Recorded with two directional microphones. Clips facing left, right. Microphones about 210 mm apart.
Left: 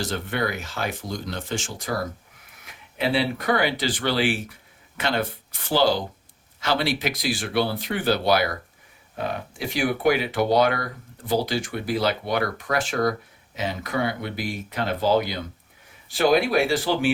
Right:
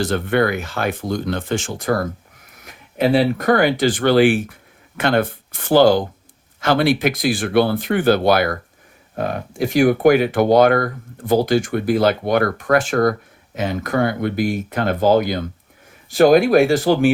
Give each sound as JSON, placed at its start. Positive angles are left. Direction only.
{"t": 0.0, "sound": "speech", "side_deg": -60}
{"t": 2.6, "sound": "speech", "side_deg": -45}